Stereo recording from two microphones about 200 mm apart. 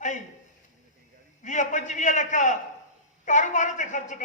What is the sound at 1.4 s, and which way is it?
A man's voice, 40° left (ahead or behind).